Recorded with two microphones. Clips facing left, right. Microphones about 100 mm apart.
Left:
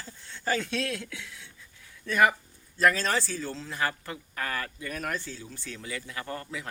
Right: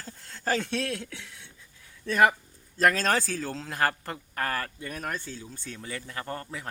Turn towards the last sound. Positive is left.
turn(degrees=-40)  # may be behind; listen again after turning